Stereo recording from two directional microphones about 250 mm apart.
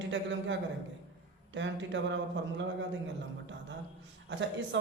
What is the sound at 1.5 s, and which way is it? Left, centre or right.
Speech, right.